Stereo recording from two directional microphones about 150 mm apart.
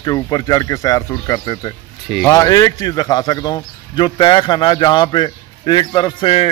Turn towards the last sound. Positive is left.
turn(degrees=35)  # may be behind; listen again after turning